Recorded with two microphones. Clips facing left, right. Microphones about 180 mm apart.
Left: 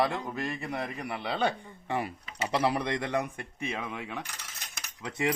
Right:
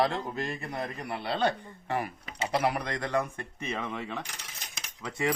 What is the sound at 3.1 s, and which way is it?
Speech, 15° left (ahead or behind).